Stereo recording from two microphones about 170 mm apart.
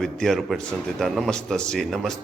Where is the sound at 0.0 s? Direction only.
Centre (ahead or behind).